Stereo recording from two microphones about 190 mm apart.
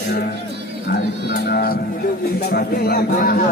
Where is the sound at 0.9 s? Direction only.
55° left (ahead or behind).